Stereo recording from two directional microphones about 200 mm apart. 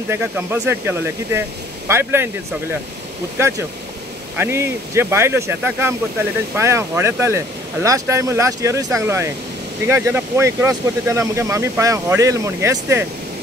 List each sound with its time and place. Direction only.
0.1 s speech: 10° right (ahead or behind)
3.3 s speech: 15° right (ahead or behind)